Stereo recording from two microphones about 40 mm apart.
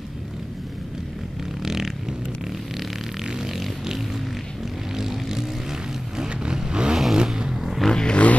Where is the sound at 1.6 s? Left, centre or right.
Centre.